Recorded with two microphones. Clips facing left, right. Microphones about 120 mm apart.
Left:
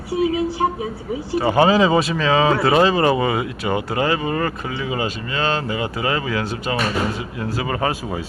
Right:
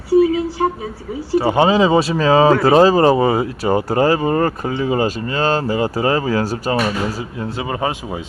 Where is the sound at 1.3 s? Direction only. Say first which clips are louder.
Right 2 dB; 25° right (ahead or behind); by 6.7 s 40° right (ahead or behind).